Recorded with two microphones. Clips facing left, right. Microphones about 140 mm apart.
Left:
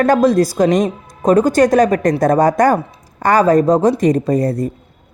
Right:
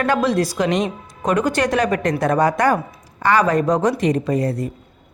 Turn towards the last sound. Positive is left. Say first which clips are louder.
# left 4 dB
turn(degrees=40)  # may be behind; listen again after turning